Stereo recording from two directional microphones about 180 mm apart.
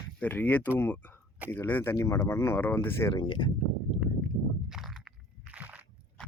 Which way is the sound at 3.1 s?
25° left (ahead or behind).